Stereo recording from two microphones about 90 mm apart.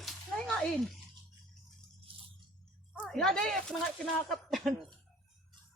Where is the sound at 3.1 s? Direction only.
5° left (ahead or behind).